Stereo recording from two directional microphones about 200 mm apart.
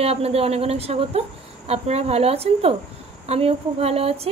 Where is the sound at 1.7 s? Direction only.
30° right (ahead or behind).